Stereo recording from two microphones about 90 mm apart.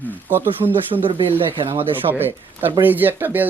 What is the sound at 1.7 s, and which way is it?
Speech, 25° right (ahead or behind).